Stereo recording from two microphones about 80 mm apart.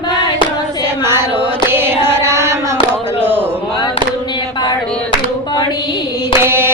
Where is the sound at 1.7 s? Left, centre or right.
Right.